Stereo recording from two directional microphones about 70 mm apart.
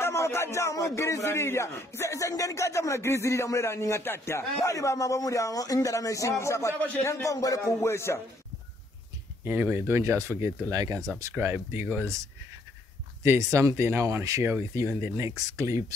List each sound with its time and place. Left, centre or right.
0.0 s speech: left
4.6 s speech: left
7.3 s speech: left
7.8 s speech: left
9.4 s speech: right
11.3 s speech: right
13.2 s speech: right